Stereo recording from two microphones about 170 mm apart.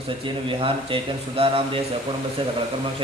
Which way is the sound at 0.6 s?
30° right (ahead or behind).